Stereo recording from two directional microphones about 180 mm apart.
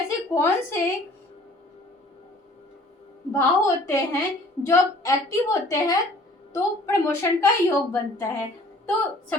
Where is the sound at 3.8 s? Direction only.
15° left (ahead or behind).